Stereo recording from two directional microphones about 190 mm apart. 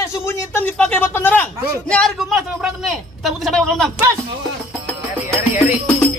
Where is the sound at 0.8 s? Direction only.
10° left (ahead or behind).